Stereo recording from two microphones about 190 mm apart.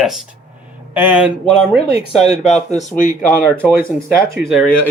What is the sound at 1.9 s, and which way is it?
Speech, 35° left (ahead or behind).